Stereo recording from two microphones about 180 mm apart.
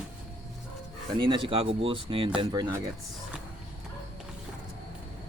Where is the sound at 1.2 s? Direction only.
30° right (ahead or behind).